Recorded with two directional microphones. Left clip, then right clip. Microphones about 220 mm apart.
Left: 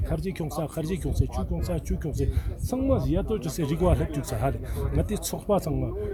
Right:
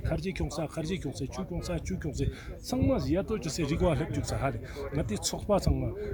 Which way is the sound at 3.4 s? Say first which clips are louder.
Left 3 dB; 10° left (ahead or behind).